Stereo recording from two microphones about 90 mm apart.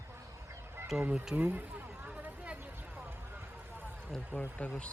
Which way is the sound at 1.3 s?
15° right (ahead or behind).